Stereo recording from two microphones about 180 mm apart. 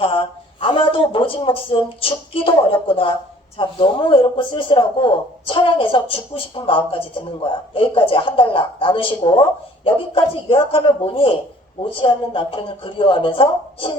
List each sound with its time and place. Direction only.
0.0 s speech: 30° left (ahead or behind)